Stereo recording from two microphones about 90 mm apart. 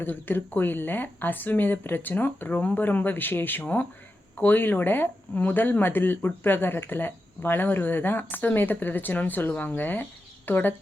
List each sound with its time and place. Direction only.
0.0 s speech: 20° left (ahead or behind)